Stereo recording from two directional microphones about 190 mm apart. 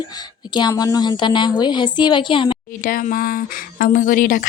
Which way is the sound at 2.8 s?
45° left (ahead or behind).